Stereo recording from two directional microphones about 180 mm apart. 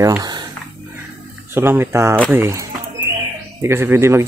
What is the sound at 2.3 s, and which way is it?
Music, 15° right (ahead or behind).